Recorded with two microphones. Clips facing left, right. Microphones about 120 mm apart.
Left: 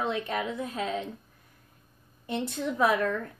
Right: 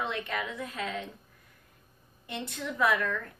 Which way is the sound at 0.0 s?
30° left (ahead or behind).